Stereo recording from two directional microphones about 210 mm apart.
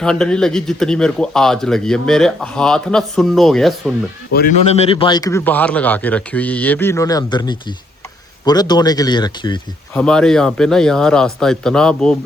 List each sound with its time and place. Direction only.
0.0 s a man's voice: 5° left (ahead or behind)
4.3 s a man's voice: 50° left (ahead or behind)
4.6 s a man's voice: 30° left (ahead or behind)
9.9 s a man's voice: 5° left (ahead or behind)